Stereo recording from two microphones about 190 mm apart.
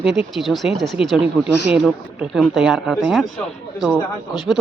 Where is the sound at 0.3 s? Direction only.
Centre (ahead or behind).